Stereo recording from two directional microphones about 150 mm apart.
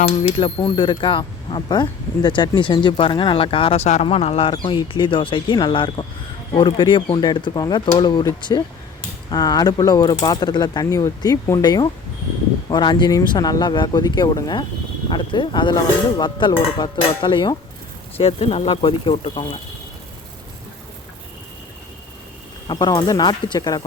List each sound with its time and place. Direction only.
0.2 s speech: 40° left (ahead or behind)
18.2 s speech: 40° left (ahead or behind)
22.6 s speech: 25° left (ahead or behind)